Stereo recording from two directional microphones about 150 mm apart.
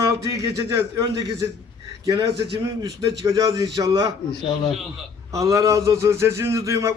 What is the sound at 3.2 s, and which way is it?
Speech, 25° right (ahead or behind).